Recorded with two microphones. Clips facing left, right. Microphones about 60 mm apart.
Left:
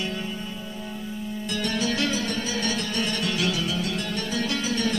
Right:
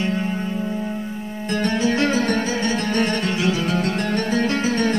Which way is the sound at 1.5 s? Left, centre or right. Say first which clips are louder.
Right 7 dB; right.